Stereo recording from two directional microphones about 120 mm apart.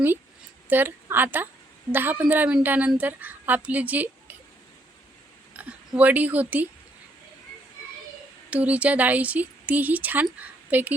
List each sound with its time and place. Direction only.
0.7 s speech: 15° right (ahead or behind)
5.5 s speech: 10° right (ahead or behind)
8.4 s a woman's voice: 10° right (ahead or behind)